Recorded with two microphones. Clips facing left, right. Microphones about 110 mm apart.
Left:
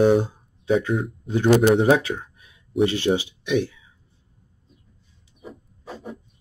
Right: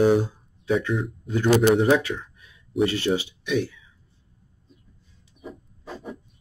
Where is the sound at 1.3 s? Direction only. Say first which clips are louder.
Left 2 dB; 25° left (ahead or behind).